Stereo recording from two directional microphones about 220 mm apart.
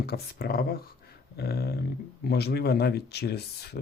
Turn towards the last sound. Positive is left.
turn(degrees=45)  # may be behind; listen again after turning